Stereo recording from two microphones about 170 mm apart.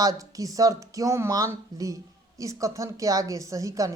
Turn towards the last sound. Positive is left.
turn(degrees=-20)  # may be behind; listen again after turning